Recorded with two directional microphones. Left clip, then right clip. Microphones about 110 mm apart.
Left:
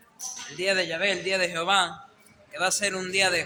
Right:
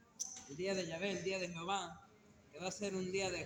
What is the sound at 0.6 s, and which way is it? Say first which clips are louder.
A man's voice: left 15 dB; 45° left (ahead or behind).